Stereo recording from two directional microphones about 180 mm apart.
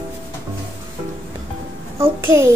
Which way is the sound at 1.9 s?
15° right (ahead or behind).